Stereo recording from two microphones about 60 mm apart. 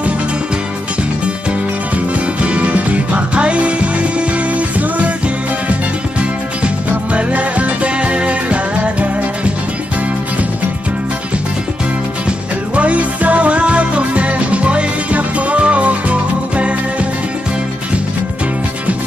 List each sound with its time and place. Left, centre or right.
2.1 s music: right
6.6 s music: right
12.3 s music: right